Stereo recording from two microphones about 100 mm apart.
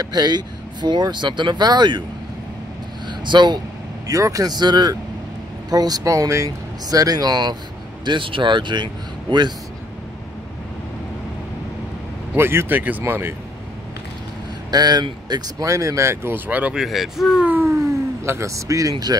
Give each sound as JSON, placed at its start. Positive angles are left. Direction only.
{"t": 0.0, "sound": "speech", "side_deg": -45}
{"t": 3.1, "sound": "a sound", "side_deg": -50}
{"t": 4.1, "sound": "speech", "side_deg": -35}
{"t": 8.0, "sound": "speech", "side_deg": -55}
{"t": 12.4, "sound": "speech", "side_deg": -25}
{"t": 14.7, "sound": "speech", "side_deg": -45}
{"t": 15.6, "sound": "speech", "side_deg": -30}
{"t": 16.4, "sound": "speech", "side_deg": -15}
{"t": 16.8, "sound": "speech", "side_deg": 0}
{"t": 17.5, "sound": "a sound", "side_deg": -20}
{"t": 18.2, "sound": "speech", "side_deg": -30}